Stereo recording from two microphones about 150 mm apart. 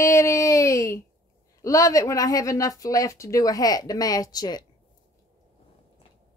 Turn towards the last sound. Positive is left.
turn(degrees=25)  # may be behind; listen again after turning